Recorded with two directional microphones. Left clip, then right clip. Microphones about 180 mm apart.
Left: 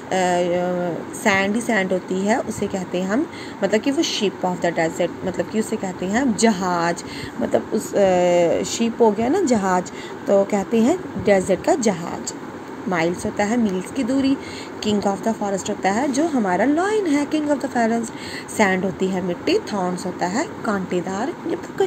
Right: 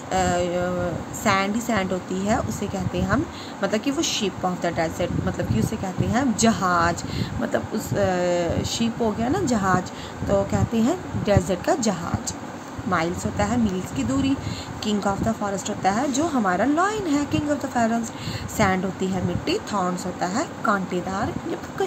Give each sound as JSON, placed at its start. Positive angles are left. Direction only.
{"t": 0.1, "sound": "speech", "side_deg": 15}